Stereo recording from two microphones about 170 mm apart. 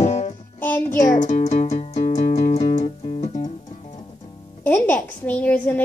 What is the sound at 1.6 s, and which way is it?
Music, 40° left (ahead or behind).